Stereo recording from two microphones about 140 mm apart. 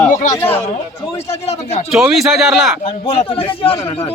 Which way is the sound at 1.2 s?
50° left (ahead or behind).